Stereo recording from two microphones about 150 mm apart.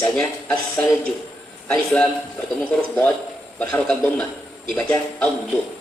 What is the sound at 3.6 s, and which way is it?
A man's voice, 5° left (ahead or behind).